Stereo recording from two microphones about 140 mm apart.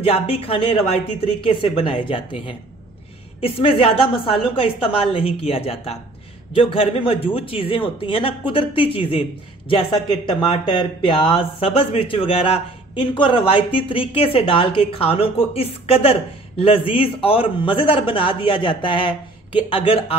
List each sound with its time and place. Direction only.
0.0 s a woman's voice: 45° left (ahead or behind)